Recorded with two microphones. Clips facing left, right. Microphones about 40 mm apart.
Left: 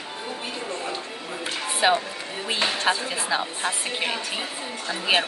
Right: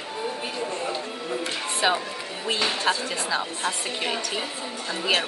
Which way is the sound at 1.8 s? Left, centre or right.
Centre.